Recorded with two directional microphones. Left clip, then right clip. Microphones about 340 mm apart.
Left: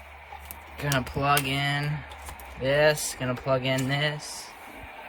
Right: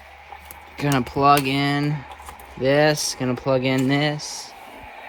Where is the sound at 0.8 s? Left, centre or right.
Centre.